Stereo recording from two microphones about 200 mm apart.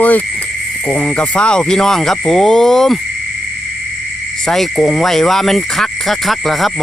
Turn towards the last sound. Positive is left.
turn(degrees=0)  # may be behind; listen again after turning